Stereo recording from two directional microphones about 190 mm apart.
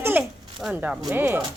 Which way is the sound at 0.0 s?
5° right (ahead or behind).